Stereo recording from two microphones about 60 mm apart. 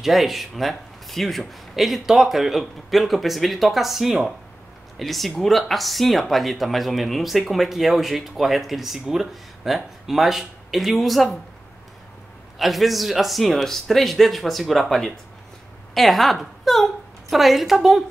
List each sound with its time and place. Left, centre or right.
0.0 s speech: centre
12.5 s a woman's voice: centre